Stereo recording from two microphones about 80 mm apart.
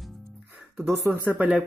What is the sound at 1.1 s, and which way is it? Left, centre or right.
Speech, centre.